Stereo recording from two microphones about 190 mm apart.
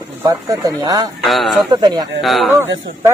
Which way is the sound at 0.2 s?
20° right (ahead or behind).